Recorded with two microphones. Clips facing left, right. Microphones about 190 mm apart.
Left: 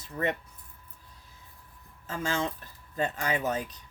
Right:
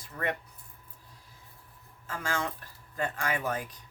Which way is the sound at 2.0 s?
25° left (ahead or behind).